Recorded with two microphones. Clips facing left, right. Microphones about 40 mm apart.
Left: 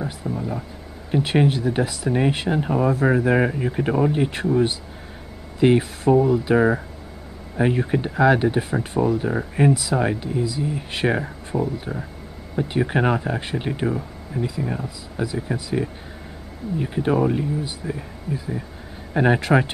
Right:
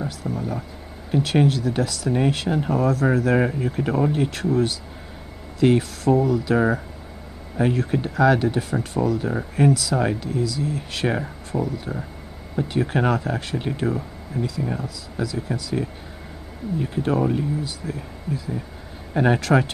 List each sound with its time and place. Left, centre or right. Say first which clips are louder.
0.0 s speech: even; centre